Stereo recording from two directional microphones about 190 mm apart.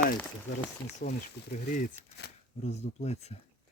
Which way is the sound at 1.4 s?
60° left (ahead or behind).